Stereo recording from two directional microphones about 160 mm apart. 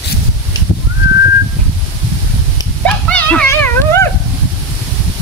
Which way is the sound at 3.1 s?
10° left (ahead or behind).